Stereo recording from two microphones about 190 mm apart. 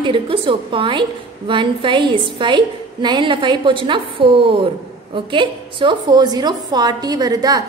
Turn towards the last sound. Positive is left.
turn(degrees=-20)  # may be behind; listen again after turning